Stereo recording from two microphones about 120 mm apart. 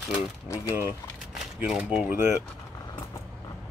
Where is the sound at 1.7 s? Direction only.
5° right (ahead or behind).